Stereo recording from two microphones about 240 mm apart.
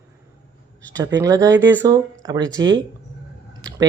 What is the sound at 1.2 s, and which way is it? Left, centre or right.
Speech, centre.